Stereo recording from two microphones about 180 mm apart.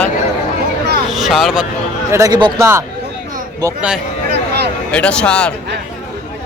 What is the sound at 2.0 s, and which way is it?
A man's voice, 15° right (ahead or behind).